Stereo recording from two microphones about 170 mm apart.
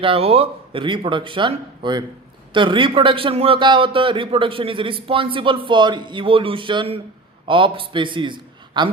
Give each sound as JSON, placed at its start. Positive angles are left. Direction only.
{"t": 0.0, "sound": "a man's voice", "side_deg": -35}